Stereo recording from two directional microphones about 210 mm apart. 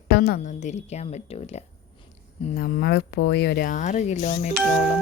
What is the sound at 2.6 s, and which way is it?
Speech, 45° left (ahead or behind).